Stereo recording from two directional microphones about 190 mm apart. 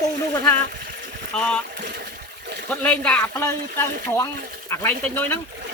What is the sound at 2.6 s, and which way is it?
Speech, 5° left (ahead or behind).